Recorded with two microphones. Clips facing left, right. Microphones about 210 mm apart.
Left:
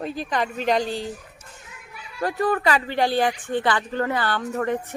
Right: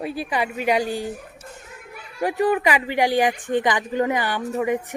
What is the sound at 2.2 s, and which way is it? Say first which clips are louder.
Speech: right 2 dB; 15° right (ahead or behind).